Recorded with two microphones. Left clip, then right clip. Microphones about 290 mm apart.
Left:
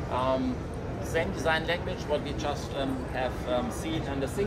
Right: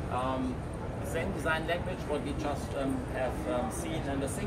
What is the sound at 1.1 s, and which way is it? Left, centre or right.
Speech, left.